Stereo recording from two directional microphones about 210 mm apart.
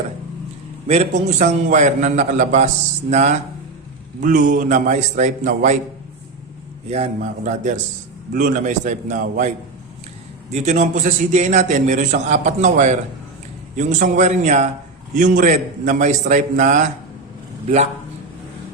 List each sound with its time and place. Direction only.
0.9 s a man's voice: 30° right (ahead or behind)
6.8 s a man's voice: 30° right (ahead or behind)
10.5 s a man's voice: 35° right (ahead or behind)